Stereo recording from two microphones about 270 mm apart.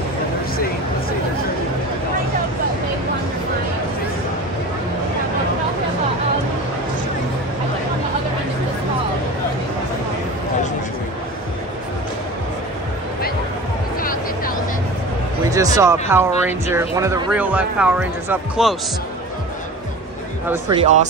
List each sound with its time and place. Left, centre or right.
15.5 s speech: centre
20.7 s speech: right